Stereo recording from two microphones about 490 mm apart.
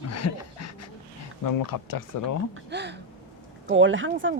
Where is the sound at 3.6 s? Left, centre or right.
Right.